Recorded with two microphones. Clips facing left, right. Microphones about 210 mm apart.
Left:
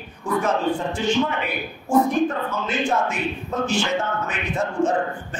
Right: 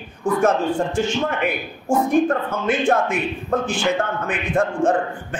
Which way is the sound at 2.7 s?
55° right (ahead or behind).